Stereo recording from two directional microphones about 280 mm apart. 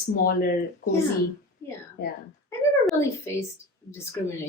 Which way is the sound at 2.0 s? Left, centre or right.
Left.